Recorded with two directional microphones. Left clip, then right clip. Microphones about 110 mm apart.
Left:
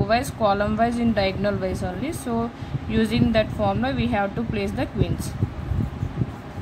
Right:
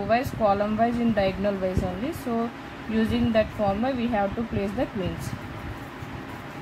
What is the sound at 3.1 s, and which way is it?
Speech, 15° right (ahead or behind).